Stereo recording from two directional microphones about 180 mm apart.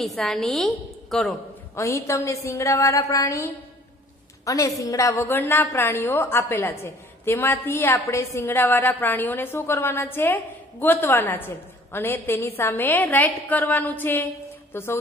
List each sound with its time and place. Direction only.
0.0 s a woman's voice: centre (ahead or behind)
1.8 s a woman's voice: 15° left (ahead or behind)
4.5 s a woman's voice: 15° left (ahead or behind)